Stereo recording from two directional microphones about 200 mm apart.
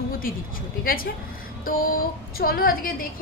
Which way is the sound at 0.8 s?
45° left (ahead or behind).